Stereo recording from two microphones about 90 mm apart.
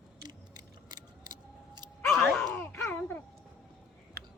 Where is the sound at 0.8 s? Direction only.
50° right (ahead or behind).